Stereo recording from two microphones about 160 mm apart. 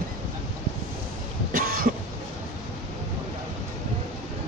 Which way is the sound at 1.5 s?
60° right (ahead or behind).